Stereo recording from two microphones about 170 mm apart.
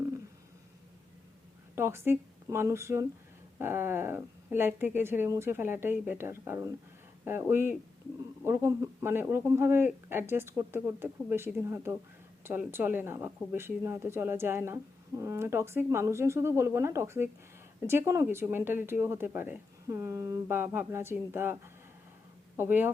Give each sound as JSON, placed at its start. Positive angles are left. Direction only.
{"t": 1.7, "sound": "speech", "side_deg": -15}
{"t": 22.5, "sound": "speech", "side_deg": -10}